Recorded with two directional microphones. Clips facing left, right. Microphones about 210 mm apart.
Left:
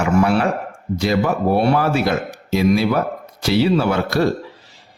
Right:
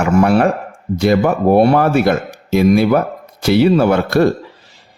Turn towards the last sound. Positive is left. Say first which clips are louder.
# right 5 dB
turn(degrees=-55)  # may be behind; listen again after turning